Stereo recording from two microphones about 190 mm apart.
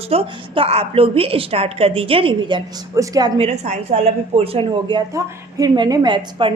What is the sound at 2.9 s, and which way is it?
A woman's voice, 15° right (ahead or behind).